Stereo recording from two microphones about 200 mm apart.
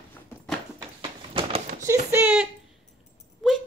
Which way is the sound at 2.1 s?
10° right (ahead or behind).